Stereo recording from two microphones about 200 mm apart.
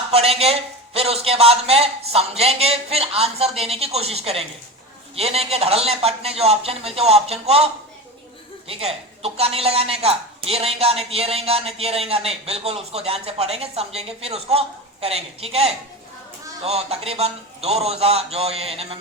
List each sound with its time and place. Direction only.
0.1 s speech: 30° right (ahead or behind)